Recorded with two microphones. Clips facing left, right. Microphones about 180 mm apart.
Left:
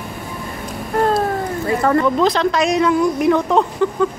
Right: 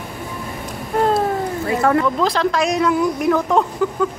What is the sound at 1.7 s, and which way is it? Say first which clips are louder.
A woman's voice: left 1 dB; 5° right (ahead or behind).